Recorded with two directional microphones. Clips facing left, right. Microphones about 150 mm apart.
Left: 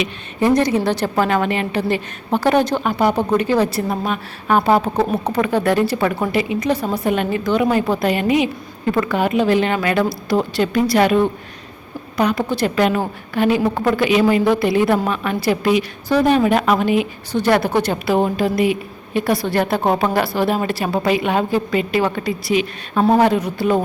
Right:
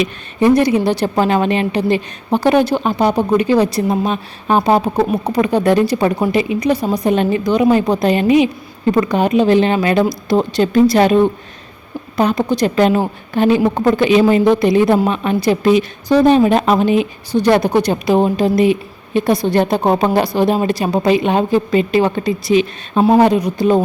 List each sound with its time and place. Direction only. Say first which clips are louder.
0.3 s a woman's voice: right 4 dB; 15° right (ahead or behind)
12.7 s a woman's voice: right 4 dB; 30° right (ahead or behind)